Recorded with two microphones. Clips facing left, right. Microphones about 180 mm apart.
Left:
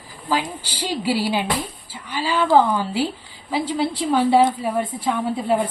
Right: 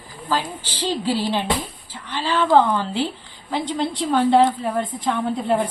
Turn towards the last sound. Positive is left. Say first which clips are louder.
# even
turn(degrees=0)  # may be behind; listen again after turning